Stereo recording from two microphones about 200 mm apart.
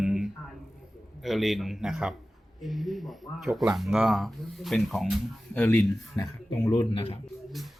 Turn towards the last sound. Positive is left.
turn(degrees=25)  # may be behind; listen again after turning